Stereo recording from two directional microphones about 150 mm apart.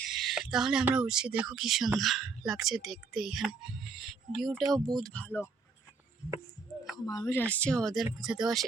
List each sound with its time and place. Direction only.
0.1 s speech: centre (ahead or behind)
6.9 s speech: 25° left (ahead or behind); by 8.6 s centre (ahead or behind)